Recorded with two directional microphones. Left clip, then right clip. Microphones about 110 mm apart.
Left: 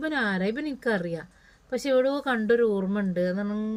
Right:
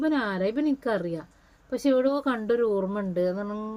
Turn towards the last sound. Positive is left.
turn(degrees=-30)  # may be behind; listen again after turning